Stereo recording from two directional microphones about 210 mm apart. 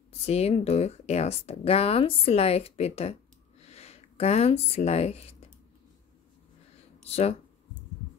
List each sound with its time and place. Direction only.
0.1 s speech: 30° left (ahead or behind)
7.1 s speech: 30° left (ahead or behind)